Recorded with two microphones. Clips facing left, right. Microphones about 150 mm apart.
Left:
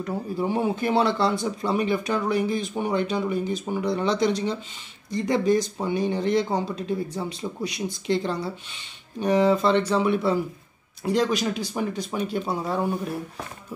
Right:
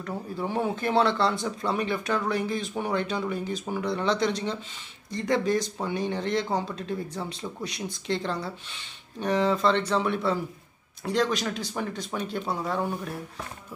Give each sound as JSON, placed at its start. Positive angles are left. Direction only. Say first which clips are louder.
{"t": 0.0, "sound": "speech", "louder": "left 5 dB", "side_deg": 10}